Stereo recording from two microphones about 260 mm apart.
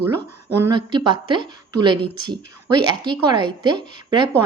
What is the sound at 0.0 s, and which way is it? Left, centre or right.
A woman's voice, centre.